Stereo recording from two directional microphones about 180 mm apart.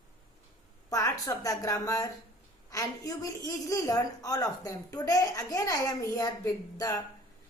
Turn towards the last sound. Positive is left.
turn(degrees=20)  # may be behind; listen again after turning